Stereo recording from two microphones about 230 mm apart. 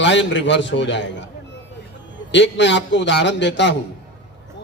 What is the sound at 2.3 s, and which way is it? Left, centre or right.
A man's voice, left.